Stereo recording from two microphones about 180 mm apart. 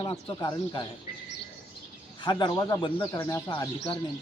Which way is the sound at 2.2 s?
25° left (ahead or behind).